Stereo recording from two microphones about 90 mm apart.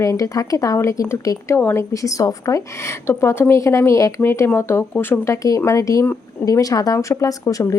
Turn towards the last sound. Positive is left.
turn(degrees=40)  # may be behind; listen again after turning